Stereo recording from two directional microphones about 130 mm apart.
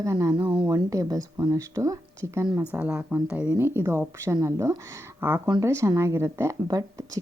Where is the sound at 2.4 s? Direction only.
35° right (ahead or behind).